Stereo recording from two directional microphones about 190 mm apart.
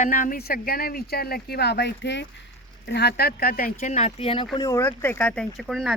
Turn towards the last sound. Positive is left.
turn(degrees=0)  # may be behind; listen again after turning